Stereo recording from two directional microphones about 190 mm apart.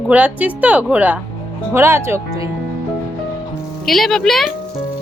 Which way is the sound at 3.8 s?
Centre (ahead or behind).